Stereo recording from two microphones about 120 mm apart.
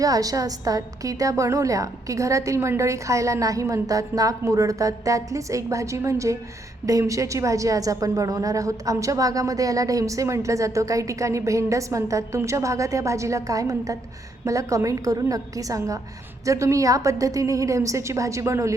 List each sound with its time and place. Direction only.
0.0 s a woman's voice: 30° right (ahead or behind)